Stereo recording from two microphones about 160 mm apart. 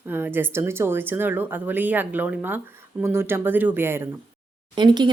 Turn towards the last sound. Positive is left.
turn(degrees=-25)  # may be behind; listen again after turning